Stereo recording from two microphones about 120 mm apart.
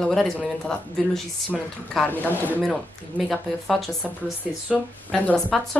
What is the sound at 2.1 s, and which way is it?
Speech, 15° left (ahead or behind).